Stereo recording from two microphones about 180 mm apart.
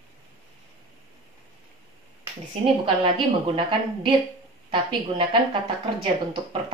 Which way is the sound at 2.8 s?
30° right (ahead or behind).